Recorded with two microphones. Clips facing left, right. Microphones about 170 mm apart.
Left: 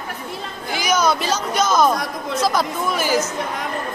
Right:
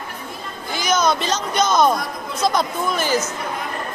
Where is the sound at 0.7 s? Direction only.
10° left (ahead or behind).